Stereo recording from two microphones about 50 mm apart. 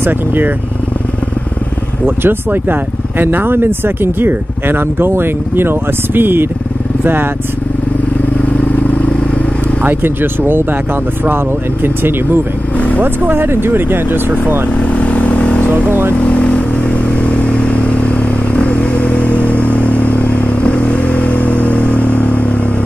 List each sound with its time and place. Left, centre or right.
0.0 s speech: right
2.0 s speech: right
8.4 s vehicle: left
9.8 s speech: right
12.7 s vehicle: left
13.0 s speech: right
14.8 s vehicle: left
15.7 s speech: right
16.2 s vehicle: left